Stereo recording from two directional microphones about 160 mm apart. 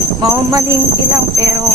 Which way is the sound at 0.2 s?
20° right (ahead or behind).